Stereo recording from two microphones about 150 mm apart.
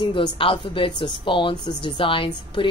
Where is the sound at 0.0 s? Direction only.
35° left (ahead or behind).